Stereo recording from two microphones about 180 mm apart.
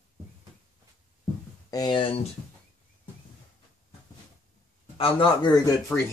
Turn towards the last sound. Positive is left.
turn(degrees=5)  # may be behind; listen again after turning